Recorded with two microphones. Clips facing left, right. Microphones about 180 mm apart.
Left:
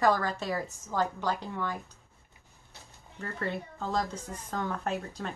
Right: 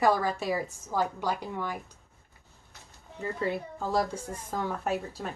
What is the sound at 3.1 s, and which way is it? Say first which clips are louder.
A woman's voice: right 4 dB; 10° right (ahead or behind).